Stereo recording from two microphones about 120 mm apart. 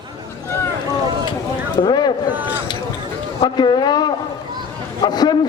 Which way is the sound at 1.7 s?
35° left (ahead or behind).